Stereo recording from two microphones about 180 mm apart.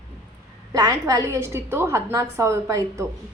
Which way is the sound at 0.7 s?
20° right (ahead or behind).